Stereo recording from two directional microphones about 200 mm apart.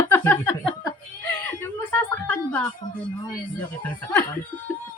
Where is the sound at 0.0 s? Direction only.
10° left (ahead or behind).